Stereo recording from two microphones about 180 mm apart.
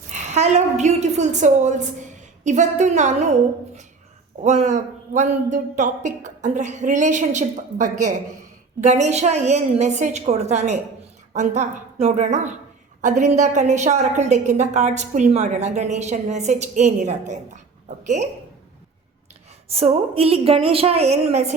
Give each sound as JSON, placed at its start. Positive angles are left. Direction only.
{"t": 0.1, "sound": "a woman's voice", "side_deg": -40}
{"t": 4.4, "sound": "a woman's voice", "side_deg": -40}
{"t": 19.6, "sound": "a woman's voice", "side_deg": -35}